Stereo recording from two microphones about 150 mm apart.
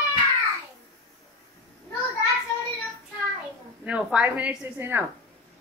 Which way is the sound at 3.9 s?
10° right (ahead or behind).